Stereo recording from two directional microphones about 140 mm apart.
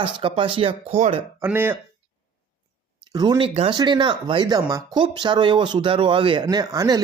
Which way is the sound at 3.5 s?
45° right (ahead or behind).